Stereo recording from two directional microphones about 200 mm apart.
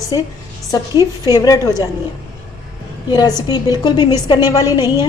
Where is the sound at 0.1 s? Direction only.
20° left (ahead or behind).